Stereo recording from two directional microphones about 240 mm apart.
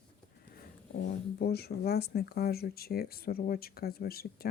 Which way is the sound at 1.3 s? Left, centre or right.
Left.